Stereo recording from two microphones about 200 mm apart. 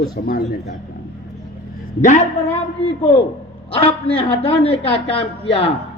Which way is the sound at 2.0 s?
35° left (ahead or behind).